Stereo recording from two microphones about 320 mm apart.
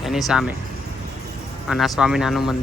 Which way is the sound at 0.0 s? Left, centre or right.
Centre.